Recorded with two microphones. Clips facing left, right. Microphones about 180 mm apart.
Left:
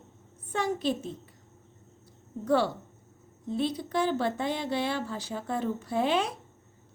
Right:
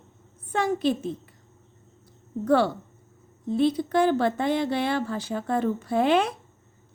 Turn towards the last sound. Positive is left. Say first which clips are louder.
# right 5 dB
turn(degrees=-60)  # may be behind; listen again after turning